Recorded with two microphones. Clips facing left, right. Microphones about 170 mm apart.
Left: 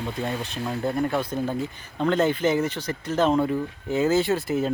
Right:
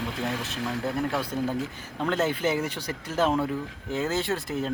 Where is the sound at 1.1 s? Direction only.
5° right (ahead or behind).